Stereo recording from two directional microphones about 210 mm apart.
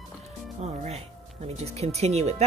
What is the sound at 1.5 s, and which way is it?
Speech, 30° right (ahead or behind).